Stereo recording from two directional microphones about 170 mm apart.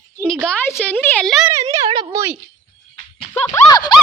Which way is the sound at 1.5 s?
20° right (ahead or behind).